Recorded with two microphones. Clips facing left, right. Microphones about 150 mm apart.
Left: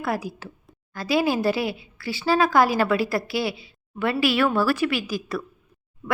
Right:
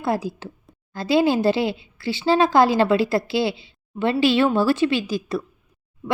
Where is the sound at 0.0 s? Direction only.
25° right (ahead or behind).